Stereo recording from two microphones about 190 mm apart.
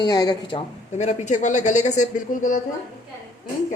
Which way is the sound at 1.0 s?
35° left (ahead or behind).